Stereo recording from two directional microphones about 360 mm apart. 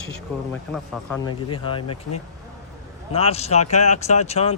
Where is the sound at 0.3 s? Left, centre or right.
Centre.